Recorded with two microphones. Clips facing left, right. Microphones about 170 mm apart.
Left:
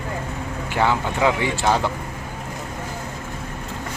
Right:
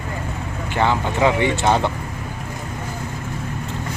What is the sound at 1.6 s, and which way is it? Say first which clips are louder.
Speech: right 1 dB; 25° right (ahead or behind).